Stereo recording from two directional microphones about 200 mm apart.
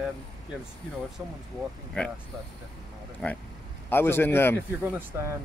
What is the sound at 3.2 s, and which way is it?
Speech, 5° left (ahead or behind).